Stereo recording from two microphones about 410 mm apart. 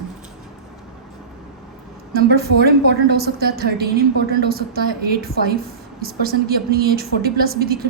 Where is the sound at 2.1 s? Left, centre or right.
Right.